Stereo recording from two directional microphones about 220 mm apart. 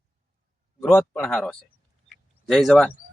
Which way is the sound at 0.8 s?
10° left (ahead or behind).